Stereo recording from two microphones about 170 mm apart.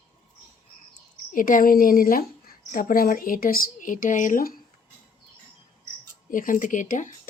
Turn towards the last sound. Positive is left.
turn(degrees=50)  # may be behind; listen again after turning